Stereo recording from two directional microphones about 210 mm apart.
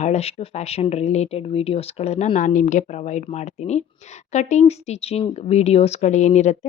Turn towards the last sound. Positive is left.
turn(degrees=35)  # may be behind; listen again after turning